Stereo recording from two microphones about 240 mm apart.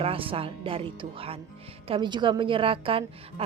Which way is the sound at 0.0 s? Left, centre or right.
Right.